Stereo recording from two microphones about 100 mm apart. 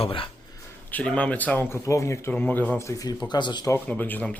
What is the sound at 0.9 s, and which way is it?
Speech, 10° left (ahead or behind).